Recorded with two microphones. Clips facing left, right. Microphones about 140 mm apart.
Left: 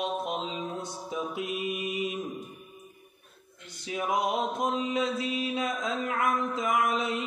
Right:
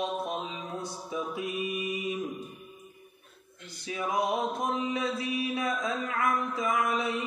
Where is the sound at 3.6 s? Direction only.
20° left (ahead or behind).